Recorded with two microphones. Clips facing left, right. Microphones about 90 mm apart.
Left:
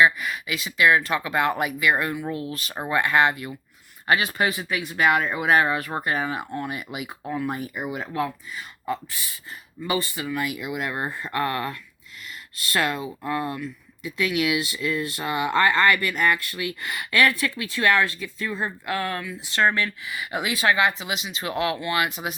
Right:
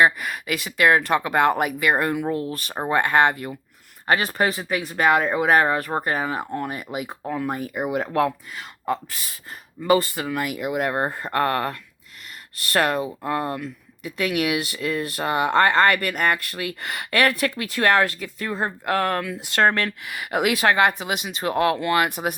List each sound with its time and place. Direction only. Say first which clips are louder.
0.0 s speech: right 1 dB; 50° right (ahead or behind)
2.7 s speech: right 2 dB; 40° right (ahead or behind); by 19.2 s 55° right (ahead or behind)
19.2 s speech: right 3 dB; 75° right (ahead or behind); by 22.4 s 50° right (ahead or behind)